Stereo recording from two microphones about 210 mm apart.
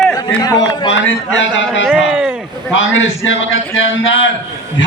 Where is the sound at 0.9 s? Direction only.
60° left (ahead or behind).